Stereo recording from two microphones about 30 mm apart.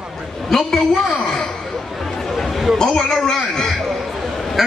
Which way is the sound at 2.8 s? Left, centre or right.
Left.